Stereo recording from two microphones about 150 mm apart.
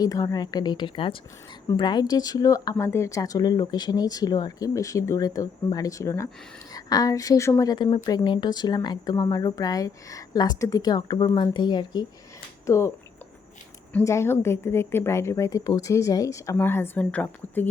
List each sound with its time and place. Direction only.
0.0 s speech: 25° left (ahead or behind)
13.9 s a woman's voice: 20° left (ahead or behind)